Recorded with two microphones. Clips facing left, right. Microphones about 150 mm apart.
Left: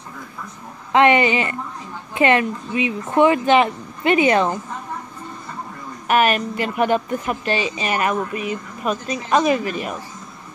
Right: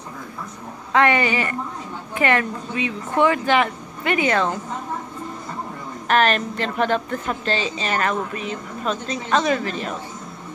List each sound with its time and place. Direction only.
0.9 s speech: 20° left (ahead or behind)
6.0 s a woman's voice: 10° left (ahead or behind)